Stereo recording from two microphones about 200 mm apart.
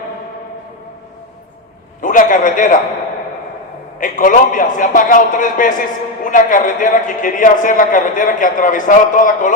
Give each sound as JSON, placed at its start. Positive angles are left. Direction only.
{"t": 2.0, "sound": "a man's voice", "side_deg": 40}
{"t": 4.0, "sound": "a man's voice", "side_deg": 40}